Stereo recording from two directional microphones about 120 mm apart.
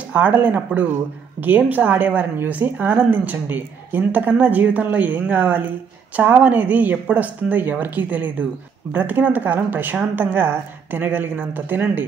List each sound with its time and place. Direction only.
0.1 s a woman's voice: 10° right (ahead or behind)